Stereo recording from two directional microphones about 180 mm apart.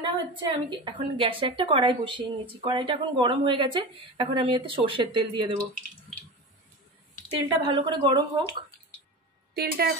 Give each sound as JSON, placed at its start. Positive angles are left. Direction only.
{"t": 0.0, "sound": "a woman's voice", "side_deg": -25}
{"t": 7.6, "sound": "a woman's voice", "side_deg": -25}
{"t": 9.5, "sound": "a woman's voice", "side_deg": -60}